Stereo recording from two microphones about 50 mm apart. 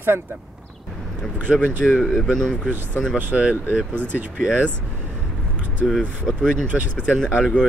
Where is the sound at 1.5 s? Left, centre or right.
Centre.